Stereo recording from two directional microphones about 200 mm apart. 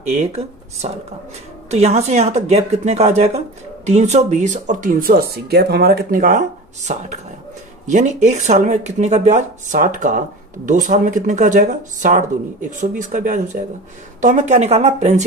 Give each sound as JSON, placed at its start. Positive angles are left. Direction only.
{"t": 1.7, "sound": "speech", "side_deg": -30}